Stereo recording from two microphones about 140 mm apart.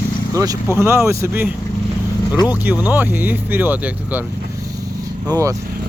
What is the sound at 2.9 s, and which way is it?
Speech, 15° right (ahead or behind).